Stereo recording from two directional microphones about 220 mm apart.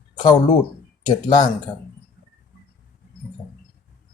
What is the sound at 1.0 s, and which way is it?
Speech, 20° left (ahead or behind).